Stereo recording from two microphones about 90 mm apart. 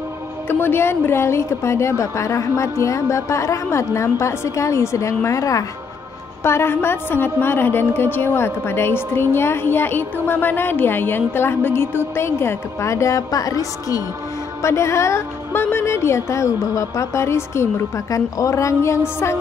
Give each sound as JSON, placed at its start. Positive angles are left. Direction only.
{"t": 0.5, "sound": "a woman's voice", "side_deg": 25}
{"t": 6.4, "sound": "a woman's voice", "side_deg": 30}